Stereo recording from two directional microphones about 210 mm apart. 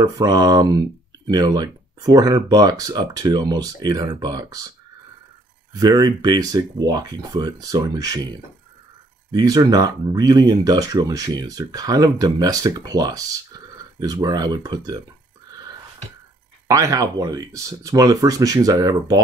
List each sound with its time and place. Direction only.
0.0 s speech: 20° right (ahead or behind)
9.3 s speech: 20° right (ahead or behind)
16.6 s speech: 15° right (ahead or behind)